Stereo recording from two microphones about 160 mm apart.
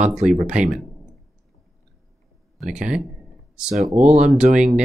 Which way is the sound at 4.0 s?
45° right (ahead or behind).